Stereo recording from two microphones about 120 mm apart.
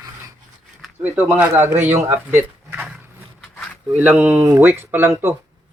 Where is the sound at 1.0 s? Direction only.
15° right (ahead or behind).